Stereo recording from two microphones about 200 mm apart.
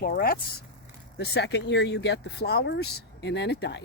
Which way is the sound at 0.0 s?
50° left (ahead or behind).